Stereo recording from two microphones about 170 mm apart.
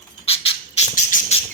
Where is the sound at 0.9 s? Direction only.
50° left (ahead or behind).